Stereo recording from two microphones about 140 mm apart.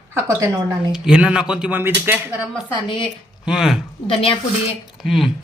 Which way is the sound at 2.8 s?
35° left (ahead or behind).